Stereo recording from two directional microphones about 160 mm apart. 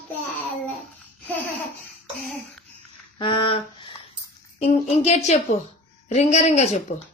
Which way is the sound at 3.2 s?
35° left (ahead or behind).